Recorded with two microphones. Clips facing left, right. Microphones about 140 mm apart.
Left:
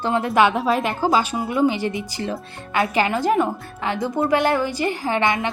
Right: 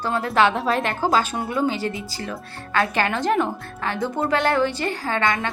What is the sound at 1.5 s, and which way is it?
A woman's voice, 15° left (ahead or behind).